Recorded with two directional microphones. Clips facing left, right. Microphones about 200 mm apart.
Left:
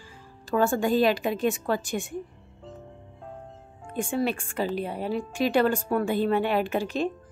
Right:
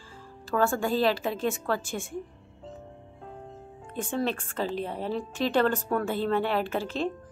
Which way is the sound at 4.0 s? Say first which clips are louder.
Left 2 dB; 10° left (ahead or behind).